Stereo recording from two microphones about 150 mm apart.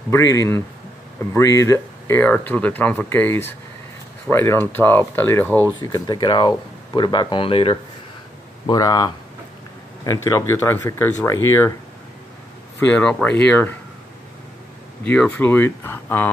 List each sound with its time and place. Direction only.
0.1 s speech: 20° left (ahead or behind)
5.8 s speech: 30° left (ahead or behind)
8.6 s speech: 25° left (ahead or behind)
12.9 s speech: 10° left (ahead or behind)
15.0 s speech: 10° left (ahead or behind)